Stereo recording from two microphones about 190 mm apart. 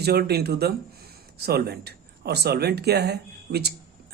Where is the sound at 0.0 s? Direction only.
55° right (ahead or behind).